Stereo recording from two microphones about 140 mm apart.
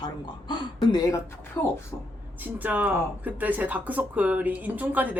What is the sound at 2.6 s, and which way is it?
Speech, 10° right (ahead or behind).